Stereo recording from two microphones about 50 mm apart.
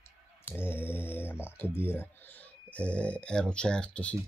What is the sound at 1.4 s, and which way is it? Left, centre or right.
Speech, left.